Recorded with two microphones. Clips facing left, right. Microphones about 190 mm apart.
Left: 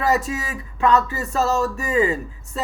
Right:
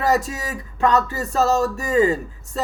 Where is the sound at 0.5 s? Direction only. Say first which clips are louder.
Even; 35° right (ahead or behind).